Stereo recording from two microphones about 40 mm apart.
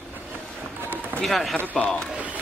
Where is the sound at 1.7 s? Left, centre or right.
Left.